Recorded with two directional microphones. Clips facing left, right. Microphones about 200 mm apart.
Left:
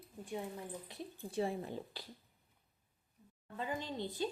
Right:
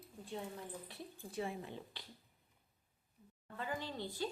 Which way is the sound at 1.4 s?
35° left (ahead or behind).